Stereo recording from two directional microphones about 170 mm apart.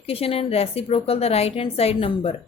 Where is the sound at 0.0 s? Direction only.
35° left (ahead or behind).